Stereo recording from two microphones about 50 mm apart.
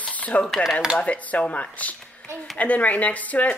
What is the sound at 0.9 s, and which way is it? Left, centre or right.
Speech, left.